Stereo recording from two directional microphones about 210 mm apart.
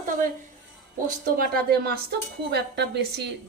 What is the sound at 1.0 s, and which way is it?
A woman's voice, 45° right (ahead or behind).